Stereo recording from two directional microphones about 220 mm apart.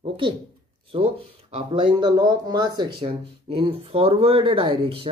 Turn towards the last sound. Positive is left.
turn(degrees=-25)  # may be behind; listen again after turning